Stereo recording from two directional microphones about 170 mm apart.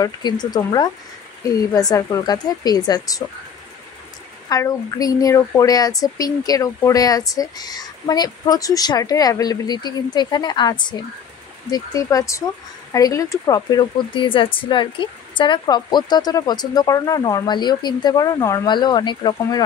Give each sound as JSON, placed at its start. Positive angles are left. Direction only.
{"t": 0.0, "sound": "speech", "side_deg": 25}
{"t": 4.5, "sound": "speech", "side_deg": 20}